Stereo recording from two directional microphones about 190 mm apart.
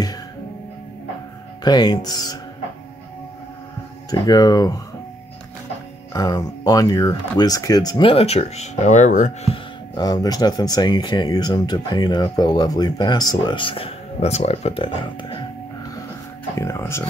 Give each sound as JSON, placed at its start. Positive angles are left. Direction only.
{"t": 1.6, "sound": "speech", "side_deg": 20}
{"t": 4.1, "sound": "speech", "side_deg": 20}
{"t": 6.1, "sound": "speech", "side_deg": 20}
{"t": 9.9, "sound": "speech", "side_deg": 20}
{"t": 16.5, "sound": "speech", "side_deg": 15}